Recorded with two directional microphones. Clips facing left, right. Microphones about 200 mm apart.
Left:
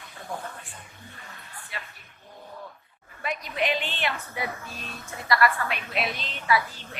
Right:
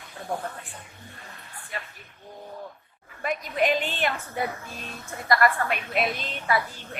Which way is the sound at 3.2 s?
45° right (ahead or behind).